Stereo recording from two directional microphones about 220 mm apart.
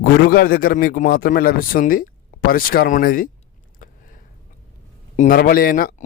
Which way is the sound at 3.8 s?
40° left (ahead or behind).